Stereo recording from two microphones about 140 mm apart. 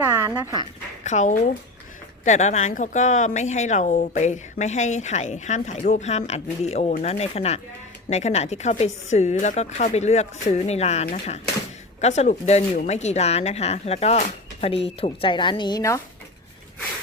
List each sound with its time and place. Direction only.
0.0 s dog: 25° right (ahead or behind)
0.3 s speech: 10° right (ahead or behind)
1.0 s speech: 60° left (ahead or behind); by 15.8 s 35° left (ahead or behind)